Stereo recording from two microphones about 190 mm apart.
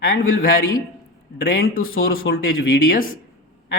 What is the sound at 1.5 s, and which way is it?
Speech, 50° left (ahead or behind).